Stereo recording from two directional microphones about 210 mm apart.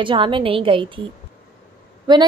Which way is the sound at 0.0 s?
25° right (ahead or behind).